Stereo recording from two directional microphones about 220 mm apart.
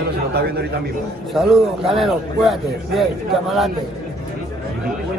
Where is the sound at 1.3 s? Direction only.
Centre (ahead or behind).